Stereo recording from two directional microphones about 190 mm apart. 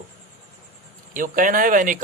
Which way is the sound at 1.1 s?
45° right (ahead or behind).